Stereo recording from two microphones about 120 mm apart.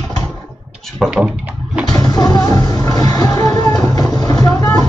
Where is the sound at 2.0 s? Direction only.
35° left (ahead or behind).